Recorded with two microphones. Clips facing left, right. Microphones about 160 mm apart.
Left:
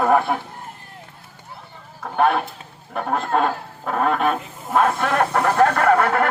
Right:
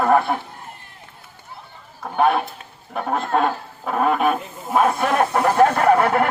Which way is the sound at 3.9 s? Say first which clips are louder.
Right 1 dB; 5° right (ahead or behind).